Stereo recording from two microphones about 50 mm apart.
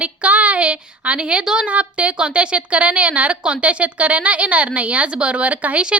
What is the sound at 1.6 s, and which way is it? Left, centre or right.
A woman's voice, right.